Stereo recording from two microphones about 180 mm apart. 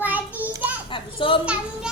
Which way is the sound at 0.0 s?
10° right (ahead or behind).